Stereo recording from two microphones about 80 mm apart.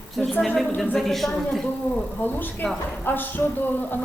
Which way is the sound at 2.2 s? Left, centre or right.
Left.